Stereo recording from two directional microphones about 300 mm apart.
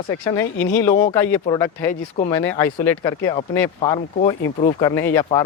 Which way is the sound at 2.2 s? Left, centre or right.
Left.